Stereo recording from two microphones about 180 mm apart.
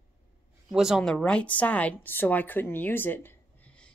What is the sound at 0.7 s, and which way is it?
Speech, centre (ahead or behind).